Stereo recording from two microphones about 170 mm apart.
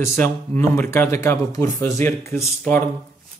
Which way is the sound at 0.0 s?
10° left (ahead or behind).